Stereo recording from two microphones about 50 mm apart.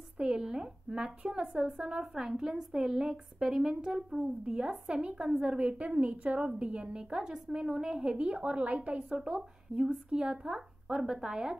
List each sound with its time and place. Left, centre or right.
0.2 s a woman's voice: centre